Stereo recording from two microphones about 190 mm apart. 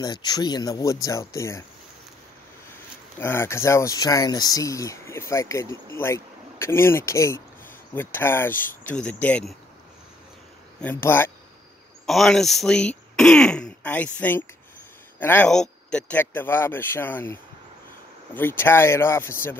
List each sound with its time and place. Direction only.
0.0 s speech: 20° left (ahead or behind)
3.2 s speech: 10° left (ahead or behind)
10.8 s speech: 10° left (ahead or behind)
12.1 s speech: centre (ahead or behind)